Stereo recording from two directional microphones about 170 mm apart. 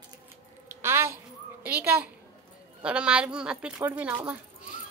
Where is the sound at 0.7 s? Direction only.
15° right (ahead or behind).